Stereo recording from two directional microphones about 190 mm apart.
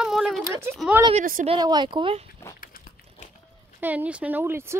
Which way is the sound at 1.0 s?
35° right (ahead or behind).